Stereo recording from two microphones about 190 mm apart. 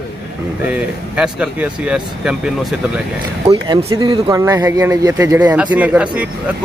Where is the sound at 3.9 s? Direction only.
25° right (ahead or behind).